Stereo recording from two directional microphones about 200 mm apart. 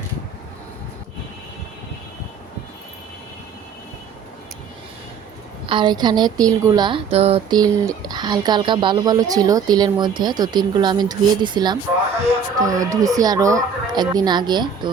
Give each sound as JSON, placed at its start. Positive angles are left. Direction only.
{"t": 5.6, "sound": "a woman's voice", "side_deg": -25}